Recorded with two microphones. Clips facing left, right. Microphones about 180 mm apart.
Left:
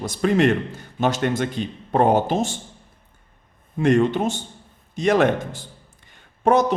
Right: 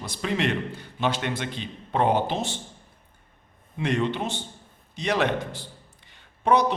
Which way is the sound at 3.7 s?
45° left (ahead or behind).